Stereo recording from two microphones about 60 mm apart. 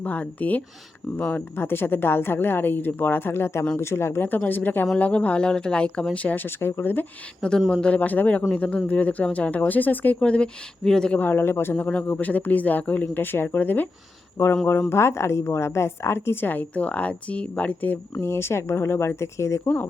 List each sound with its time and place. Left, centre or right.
0.0 s a woman's voice: left
4.3 s a woman's voice: left
6.1 s a woman's voice: left
7.7 s speech: centre
11.2 s a woman's voice: left
14.7 s a woman's voice: left
18.1 s speech: left
19.6 s a woman's voice: left